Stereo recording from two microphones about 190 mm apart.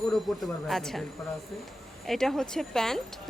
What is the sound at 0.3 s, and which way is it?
Speech, centre (ahead or behind).